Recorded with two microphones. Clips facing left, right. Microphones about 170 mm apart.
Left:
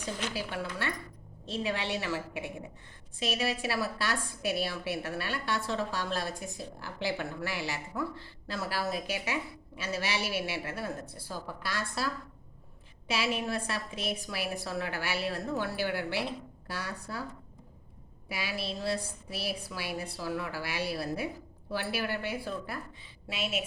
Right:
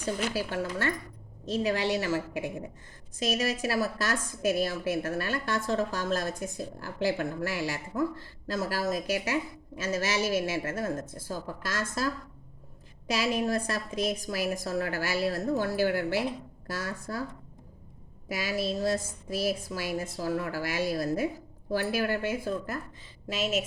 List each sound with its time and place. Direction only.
0.3 s a woman's voice: 40° right (ahead or behind)
18.3 s a woman's voice: 45° right (ahead or behind)